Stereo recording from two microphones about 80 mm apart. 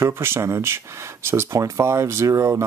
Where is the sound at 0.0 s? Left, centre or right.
Right.